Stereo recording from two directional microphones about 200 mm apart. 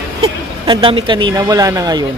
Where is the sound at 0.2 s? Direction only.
25° right (ahead or behind).